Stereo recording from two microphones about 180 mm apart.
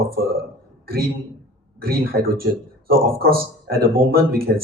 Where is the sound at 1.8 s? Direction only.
55° right (ahead or behind).